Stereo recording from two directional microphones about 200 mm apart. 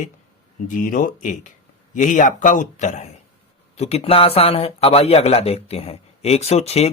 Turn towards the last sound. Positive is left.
turn(degrees=30)  # may be behind; listen again after turning